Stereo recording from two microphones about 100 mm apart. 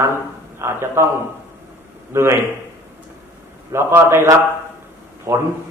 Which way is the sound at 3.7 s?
25° right (ahead or behind).